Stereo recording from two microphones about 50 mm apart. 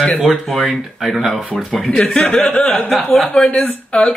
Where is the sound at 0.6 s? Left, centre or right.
Centre.